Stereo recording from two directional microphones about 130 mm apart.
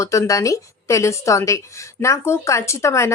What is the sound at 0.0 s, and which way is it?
Speech, 25° left (ahead or behind).